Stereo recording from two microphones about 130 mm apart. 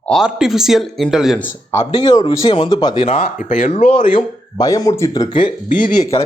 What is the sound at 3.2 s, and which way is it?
Speech, 90° left.